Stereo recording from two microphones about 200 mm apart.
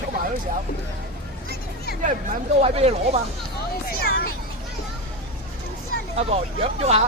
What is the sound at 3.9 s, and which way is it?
Hubbub, 50° left (ahead or behind).